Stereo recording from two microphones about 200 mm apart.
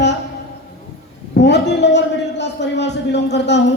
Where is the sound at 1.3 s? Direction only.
60° left (ahead or behind).